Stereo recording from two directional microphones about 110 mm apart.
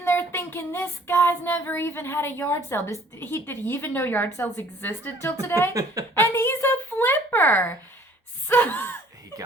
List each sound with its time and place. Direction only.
0.0 s child singing: 20° left (ahead or behind)
5.7 s a woman's voice: 35° right (ahead or behind)
6.1 s a sound: 20° left (ahead or behind)